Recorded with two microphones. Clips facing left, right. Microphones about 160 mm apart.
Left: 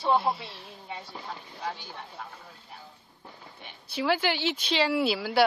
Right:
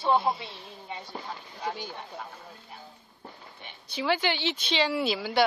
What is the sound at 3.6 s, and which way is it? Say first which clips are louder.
A woman's voice: left 2 dB; centre (ahead or behind).